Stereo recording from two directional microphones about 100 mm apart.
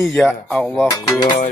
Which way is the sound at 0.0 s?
5° left (ahead or behind).